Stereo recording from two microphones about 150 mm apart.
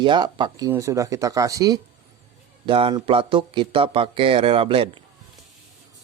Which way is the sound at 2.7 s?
35° right (ahead or behind).